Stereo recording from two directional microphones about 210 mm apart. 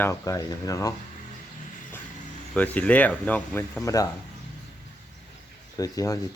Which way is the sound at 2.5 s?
5° left (ahead or behind).